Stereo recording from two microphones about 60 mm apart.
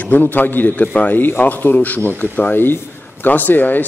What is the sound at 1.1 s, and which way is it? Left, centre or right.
A man's voice, left.